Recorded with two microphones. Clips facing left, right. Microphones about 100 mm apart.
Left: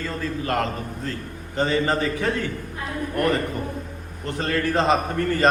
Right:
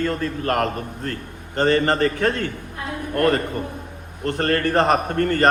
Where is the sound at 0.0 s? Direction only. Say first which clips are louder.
Right 4 dB; 60° right (ahead or behind).